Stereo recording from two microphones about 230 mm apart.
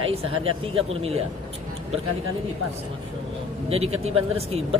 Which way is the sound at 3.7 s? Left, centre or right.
Right.